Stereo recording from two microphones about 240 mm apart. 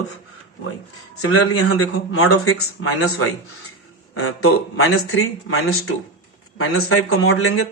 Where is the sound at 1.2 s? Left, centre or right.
Left.